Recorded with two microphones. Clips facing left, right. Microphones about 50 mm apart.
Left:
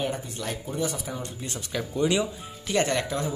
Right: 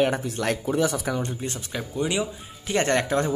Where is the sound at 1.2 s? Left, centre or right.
Right.